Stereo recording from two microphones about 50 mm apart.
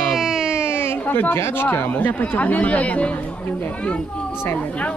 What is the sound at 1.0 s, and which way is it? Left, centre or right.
Chatter, left.